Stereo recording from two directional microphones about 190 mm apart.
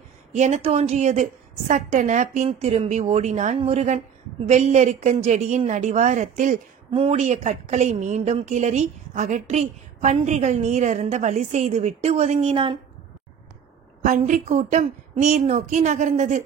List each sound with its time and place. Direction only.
0.3 s a woman's voice: 35° right (ahead or behind)
14.0 s a woman's voice: 40° right (ahead or behind)